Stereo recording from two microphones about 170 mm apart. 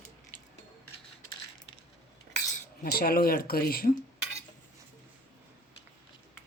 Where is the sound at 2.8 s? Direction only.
60° left (ahead or behind).